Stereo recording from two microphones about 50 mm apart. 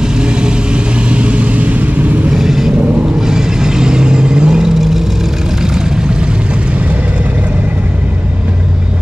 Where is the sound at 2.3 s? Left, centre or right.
Centre.